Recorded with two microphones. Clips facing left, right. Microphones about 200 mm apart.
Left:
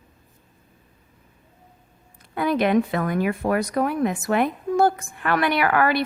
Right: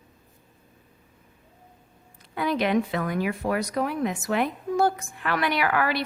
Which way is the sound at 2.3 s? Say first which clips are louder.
Left 4 dB; 50° left (ahead or behind).